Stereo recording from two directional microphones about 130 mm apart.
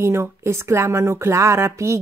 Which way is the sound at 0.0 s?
20° right (ahead or behind).